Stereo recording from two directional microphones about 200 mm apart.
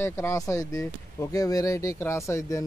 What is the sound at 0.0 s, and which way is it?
Speech, 15° left (ahead or behind).